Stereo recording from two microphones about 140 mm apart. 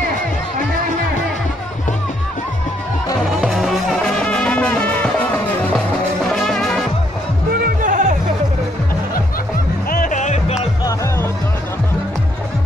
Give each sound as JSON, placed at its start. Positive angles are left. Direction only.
{"t": 3.3, "sound": "music", "side_deg": 0}
{"t": 6.3, "sound": "music", "side_deg": 0}
{"t": 7.5, "sound": "music", "side_deg": -80}
{"t": 9.8, "sound": "music", "side_deg": 75}
{"t": 10.8, "sound": "music", "side_deg": 25}